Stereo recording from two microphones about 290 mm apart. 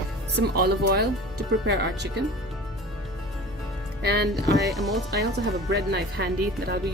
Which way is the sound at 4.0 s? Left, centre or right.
Right.